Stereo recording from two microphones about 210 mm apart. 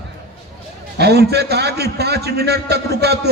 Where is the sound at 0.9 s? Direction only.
50° right (ahead or behind).